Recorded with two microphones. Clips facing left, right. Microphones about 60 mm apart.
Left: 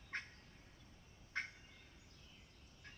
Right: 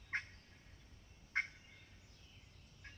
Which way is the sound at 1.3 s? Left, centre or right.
Right.